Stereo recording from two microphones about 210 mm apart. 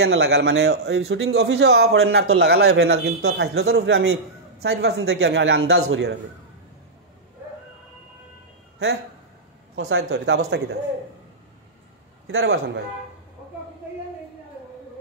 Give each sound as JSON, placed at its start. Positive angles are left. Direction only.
{"t": 0.0, "sound": "a man's voice", "side_deg": -55}
{"t": 9.8, "sound": "a man's voice", "side_deg": -65}
{"t": 12.3, "sound": "a man's voice", "side_deg": -60}